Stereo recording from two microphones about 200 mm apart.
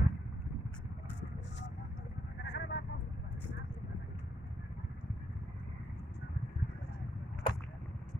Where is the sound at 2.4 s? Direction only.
60° left (ahead or behind).